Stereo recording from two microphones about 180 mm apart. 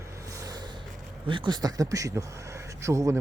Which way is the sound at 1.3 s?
25° right (ahead or behind).